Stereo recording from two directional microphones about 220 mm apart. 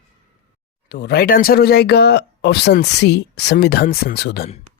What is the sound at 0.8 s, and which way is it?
Speech, 45° left (ahead or behind).